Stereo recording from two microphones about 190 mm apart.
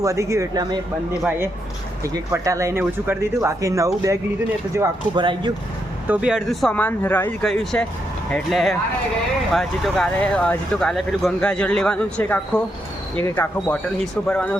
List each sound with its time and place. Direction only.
0.0 s speech: 15° right (ahead or behind)
2.1 s speech: 15° right (ahead or behind)
6.1 s speech: 5° right (ahead or behind)